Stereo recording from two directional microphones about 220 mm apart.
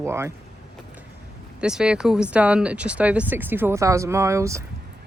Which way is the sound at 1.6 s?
5° right (ahead or behind).